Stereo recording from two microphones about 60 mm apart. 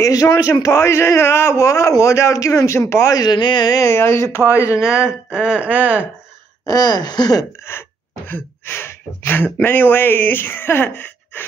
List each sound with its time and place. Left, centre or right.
0.0 s a man's voice: left
0.5 s a man's voice: left
3.1 s speech: left
3.9 s speech: left
4.7 s speech: centre
6.6 s speech: left
7.7 s speech: left